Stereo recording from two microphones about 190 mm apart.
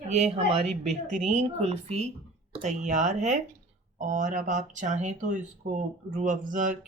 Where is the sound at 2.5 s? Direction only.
30° right (ahead or behind).